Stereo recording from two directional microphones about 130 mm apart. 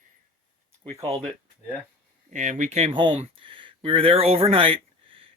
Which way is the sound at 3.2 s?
40° right (ahead or behind).